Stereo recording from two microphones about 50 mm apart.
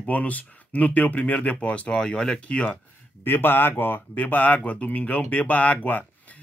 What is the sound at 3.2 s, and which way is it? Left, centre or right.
Speech, left.